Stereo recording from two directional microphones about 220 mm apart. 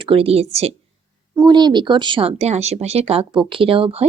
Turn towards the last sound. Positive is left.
turn(degrees=-25)  # may be behind; listen again after turning